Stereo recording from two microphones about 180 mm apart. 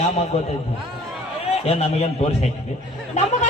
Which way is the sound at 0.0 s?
35° left (ahead or behind).